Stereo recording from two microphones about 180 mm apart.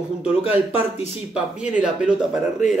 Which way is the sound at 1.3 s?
5° right (ahead or behind).